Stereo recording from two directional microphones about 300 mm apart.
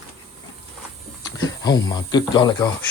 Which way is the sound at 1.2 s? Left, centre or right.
Centre.